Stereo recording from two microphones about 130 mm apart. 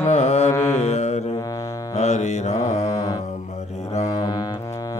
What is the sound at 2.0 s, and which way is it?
Music, 55° left (ahead or behind).